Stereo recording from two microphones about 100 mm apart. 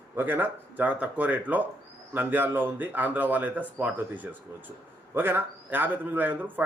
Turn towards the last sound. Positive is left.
turn(degrees=-20)  # may be behind; listen again after turning